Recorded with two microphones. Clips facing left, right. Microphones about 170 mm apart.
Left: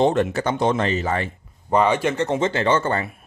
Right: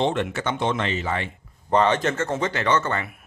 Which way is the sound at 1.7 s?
10° left (ahead or behind).